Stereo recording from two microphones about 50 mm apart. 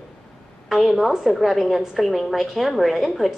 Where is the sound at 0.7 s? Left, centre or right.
Centre.